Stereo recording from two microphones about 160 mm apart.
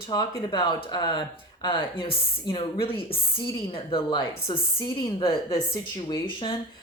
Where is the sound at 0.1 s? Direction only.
25° left (ahead or behind).